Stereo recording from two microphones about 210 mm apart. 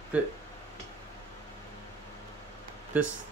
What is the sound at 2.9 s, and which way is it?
Speech, 10° right (ahead or behind).